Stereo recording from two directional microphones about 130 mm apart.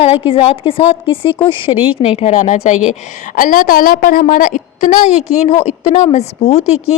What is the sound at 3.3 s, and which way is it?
A woman's voice, 90° left.